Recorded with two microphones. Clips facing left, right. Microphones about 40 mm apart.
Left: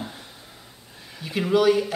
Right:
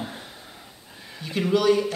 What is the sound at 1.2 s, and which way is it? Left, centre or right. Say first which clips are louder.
Speech: left 2 dB; centre.